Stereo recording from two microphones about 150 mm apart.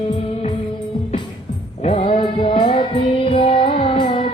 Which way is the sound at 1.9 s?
45° left (ahead or behind).